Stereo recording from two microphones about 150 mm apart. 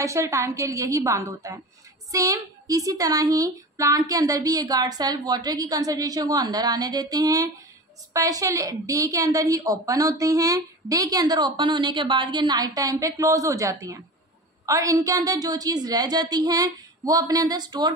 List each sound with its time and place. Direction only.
0.0 s a woman's voice: 20° right (ahead or behind)